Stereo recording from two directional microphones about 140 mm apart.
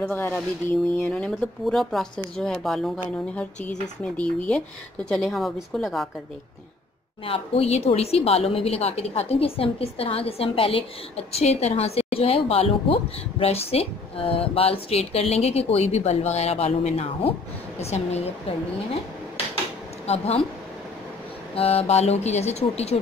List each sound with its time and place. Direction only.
0.0 s speech: 15° left (ahead or behind)
4.0 s speech: 10° left (ahead or behind)
7.2 s a woman's voice: 45° left (ahead or behind)
20.1 s a woman's voice: 50° left (ahead or behind)
21.5 s a woman's voice: 45° left (ahead or behind)